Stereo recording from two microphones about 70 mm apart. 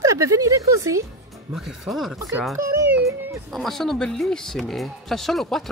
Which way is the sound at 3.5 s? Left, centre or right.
Centre.